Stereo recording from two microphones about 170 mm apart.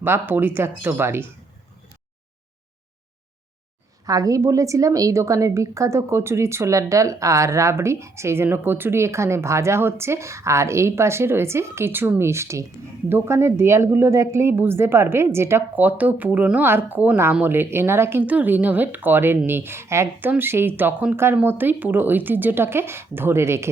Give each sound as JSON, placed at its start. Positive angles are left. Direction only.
{"t": 0.0, "sound": "a woman's voice", "side_deg": -10}
{"t": 4.0, "sound": "a woman's voice", "side_deg": -20}